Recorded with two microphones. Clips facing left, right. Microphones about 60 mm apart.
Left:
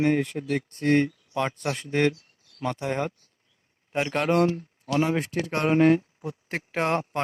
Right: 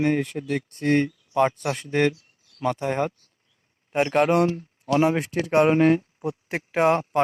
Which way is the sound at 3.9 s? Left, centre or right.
Centre.